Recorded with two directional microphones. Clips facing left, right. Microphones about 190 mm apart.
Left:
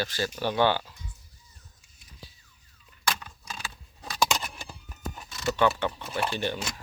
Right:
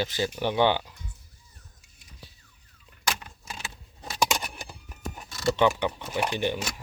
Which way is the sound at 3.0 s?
20° right (ahead or behind).